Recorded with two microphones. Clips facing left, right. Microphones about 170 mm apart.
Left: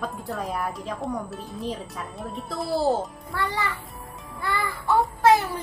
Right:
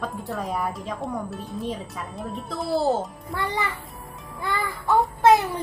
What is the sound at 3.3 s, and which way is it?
Speech, 20° right (ahead or behind).